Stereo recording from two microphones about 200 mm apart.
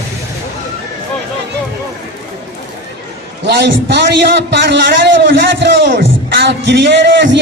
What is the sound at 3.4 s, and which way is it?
A man's voice, 55° right (ahead or behind).